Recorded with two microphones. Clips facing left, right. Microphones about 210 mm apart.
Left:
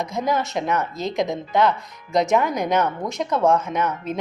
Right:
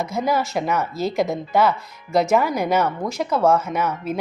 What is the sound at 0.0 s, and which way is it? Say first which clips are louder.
Speech: right 1 dB; 5° right (ahead or behind).